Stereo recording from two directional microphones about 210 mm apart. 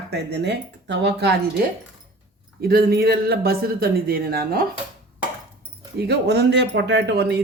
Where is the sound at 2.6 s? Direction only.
50° right (ahead or behind).